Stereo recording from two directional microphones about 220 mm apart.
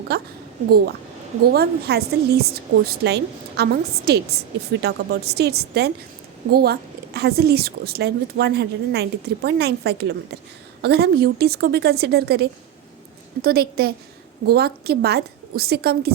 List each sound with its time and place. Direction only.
0.1 s a woman's voice: 45° right (ahead or behind)
1.5 s a woman's voice: 45° right (ahead or behind)